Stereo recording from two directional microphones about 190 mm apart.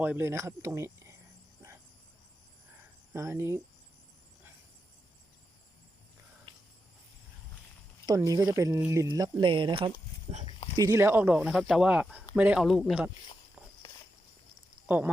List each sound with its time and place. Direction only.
0.0 s speech: 10° right (ahead or behind)
3.1 s speech: 15° right (ahead or behind)
8.0 s speech: 20° right (ahead or behind); by 10.4 s 35° right (ahead or behind)
10.8 s speech: 15° right (ahead or behind); by 13.1 s centre (ahead or behind)
13.6 s walk: 5° right (ahead or behind)
14.8 s speech: 10° right (ahead or behind)